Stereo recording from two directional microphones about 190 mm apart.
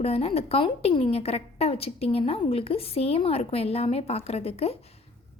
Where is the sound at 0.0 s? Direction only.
30° left (ahead or behind).